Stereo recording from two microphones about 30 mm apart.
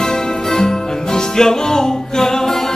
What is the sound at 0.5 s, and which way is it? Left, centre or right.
Music, left.